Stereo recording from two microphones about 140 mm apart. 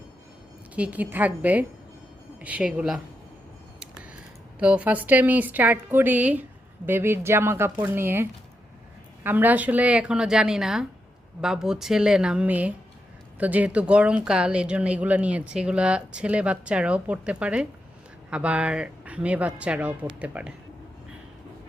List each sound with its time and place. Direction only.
0.8 s speech: 10° right (ahead or behind)
4.6 s a woman's voice: 10° right (ahead or behind)